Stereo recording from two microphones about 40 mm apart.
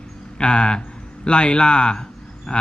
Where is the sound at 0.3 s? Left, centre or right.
Left.